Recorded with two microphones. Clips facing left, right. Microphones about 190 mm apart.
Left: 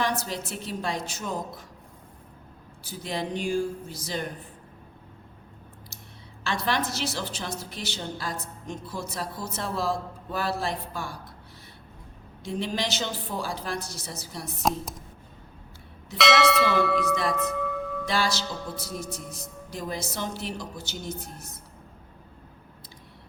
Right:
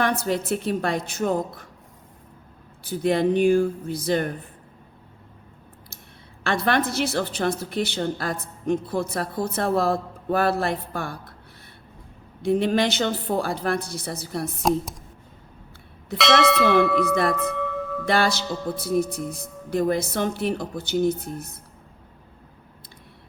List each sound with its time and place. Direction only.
0.0 s a woman's voice: 60° right (ahead or behind)
2.8 s a woman's voice: 60° right (ahead or behind)
6.4 s a woman's voice: 55° right (ahead or behind)
12.4 s a woman's voice: 60° right (ahead or behind)
14.6 s speech: centre (ahead or behind)
16.1 s speech: centre (ahead or behind)
16.6 s a woman's voice: 60° right (ahead or behind)